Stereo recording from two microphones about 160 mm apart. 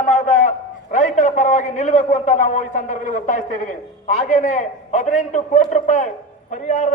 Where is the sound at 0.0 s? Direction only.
50° left (ahead or behind).